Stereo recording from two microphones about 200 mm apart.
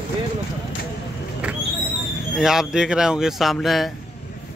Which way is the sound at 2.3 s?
5° right (ahead or behind).